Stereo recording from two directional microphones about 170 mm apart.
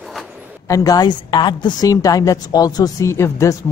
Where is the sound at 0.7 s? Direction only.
20° left (ahead or behind).